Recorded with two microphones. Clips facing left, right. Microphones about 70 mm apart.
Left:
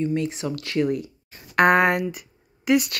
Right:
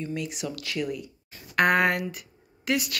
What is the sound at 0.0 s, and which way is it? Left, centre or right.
Speech, left.